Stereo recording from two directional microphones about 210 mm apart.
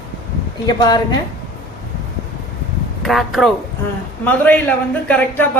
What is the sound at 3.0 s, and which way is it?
A woman's voice, centre (ahead or behind).